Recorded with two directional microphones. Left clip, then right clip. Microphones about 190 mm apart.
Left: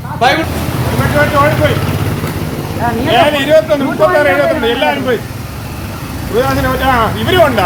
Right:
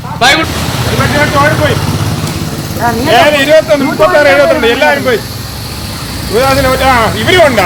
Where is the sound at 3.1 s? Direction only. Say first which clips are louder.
Right 3 dB; 25° right (ahead or behind).